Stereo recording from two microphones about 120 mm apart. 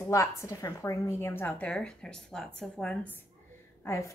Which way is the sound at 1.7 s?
5° left (ahead or behind).